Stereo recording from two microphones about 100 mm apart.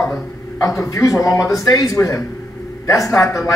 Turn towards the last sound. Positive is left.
turn(degrees=30)  # may be behind; listen again after turning